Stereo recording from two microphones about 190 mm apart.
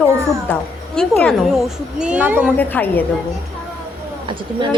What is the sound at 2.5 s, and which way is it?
Speech, 10° left (ahead or behind).